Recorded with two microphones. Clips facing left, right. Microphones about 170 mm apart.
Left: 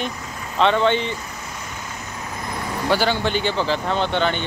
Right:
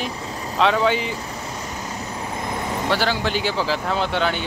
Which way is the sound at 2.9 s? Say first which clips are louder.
Left 3 dB; centre (ahead or behind).